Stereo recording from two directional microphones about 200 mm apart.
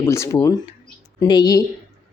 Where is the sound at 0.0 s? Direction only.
15° left (ahead or behind).